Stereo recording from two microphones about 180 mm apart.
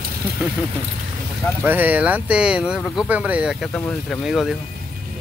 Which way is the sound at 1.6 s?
10° right (ahead or behind).